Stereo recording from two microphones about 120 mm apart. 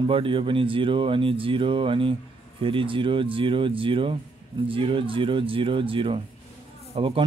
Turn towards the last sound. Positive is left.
turn(degrees=-45)  # may be behind; listen again after turning